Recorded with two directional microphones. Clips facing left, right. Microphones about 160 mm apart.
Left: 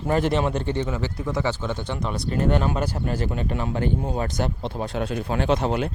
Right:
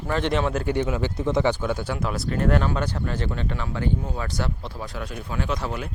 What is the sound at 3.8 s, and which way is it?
Speech, 50° left (ahead or behind).